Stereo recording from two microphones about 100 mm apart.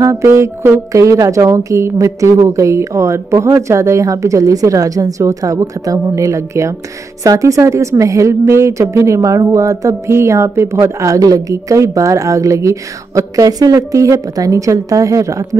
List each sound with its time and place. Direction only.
0.0 s a woman's voice: 30° right (ahead or behind)